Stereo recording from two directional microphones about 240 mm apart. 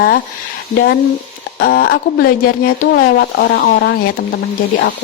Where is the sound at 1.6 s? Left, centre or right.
Left.